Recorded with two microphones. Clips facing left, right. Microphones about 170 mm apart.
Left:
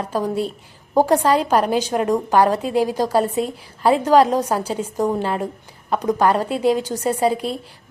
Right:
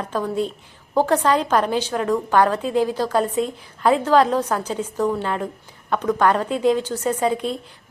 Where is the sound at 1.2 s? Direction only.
10° left (ahead or behind).